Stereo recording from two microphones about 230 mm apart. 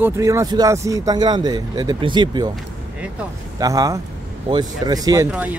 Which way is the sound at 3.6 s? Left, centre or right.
Centre.